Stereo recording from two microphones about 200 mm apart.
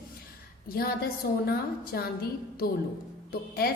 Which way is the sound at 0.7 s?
50° left (ahead or behind).